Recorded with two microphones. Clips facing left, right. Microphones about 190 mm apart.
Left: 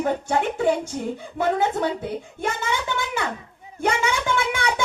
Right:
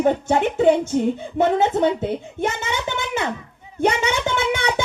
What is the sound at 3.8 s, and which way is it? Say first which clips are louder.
Speech: right 3 dB; 20° right (ahead or behind).